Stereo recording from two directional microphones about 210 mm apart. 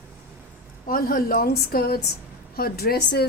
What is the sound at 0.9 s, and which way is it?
A woman's voice, 45° left (ahead or behind).